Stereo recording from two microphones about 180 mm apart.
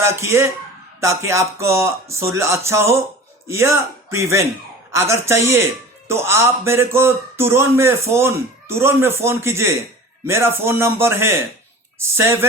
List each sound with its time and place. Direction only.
0.0 s a man's voice: 15° right (ahead or behind)